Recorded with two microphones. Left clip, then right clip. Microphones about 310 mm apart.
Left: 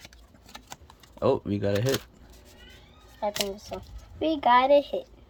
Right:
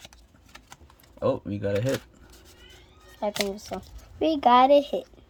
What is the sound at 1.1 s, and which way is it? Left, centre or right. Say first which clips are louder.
Speech: left 2 dB; centre.